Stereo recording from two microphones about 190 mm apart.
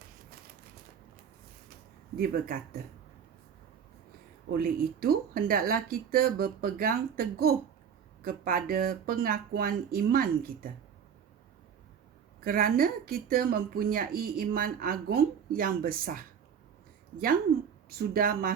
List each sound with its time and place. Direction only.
2.1 s a woman's voice: 50° right (ahead or behind)
4.5 s a woman's voice: 50° right (ahead or behind)
12.4 s a woman's voice: 50° right (ahead or behind)
17.8 s a woman's voice: 50° right (ahead or behind)